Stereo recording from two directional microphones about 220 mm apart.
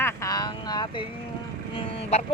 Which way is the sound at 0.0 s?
15° left (ahead or behind).